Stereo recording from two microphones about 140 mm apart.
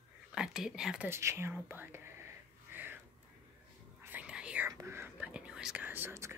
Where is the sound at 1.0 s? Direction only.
20° right (ahead or behind).